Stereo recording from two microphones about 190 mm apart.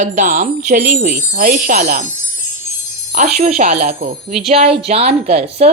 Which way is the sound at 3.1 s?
40° right (ahead or behind).